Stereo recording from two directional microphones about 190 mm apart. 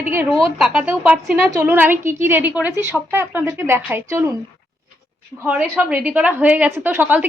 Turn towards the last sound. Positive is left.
turn(degrees=-10)  # may be behind; listen again after turning